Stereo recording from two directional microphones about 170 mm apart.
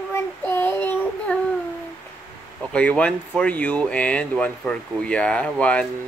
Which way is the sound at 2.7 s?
5° left (ahead or behind).